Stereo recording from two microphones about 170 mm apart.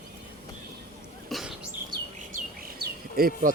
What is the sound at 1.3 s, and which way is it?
Bird, centre (ahead or behind).